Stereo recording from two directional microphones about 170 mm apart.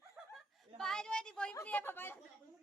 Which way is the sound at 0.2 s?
5° right (ahead or behind).